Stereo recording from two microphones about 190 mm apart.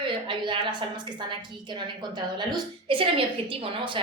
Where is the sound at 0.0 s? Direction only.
25° right (ahead or behind).